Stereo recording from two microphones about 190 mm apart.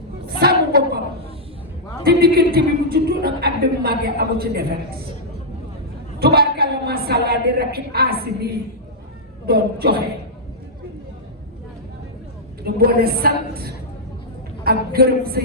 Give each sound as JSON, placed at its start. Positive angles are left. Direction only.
{"t": 0.3, "sound": "a sound", "side_deg": -50}
{"t": 2.0, "sound": "speech", "side_deg": -55}
{"t": 6.1, "sound": "a woman's voice", "side_deg": -55}
{"t": 12.6, "sound": "speech", "side_deg": -50}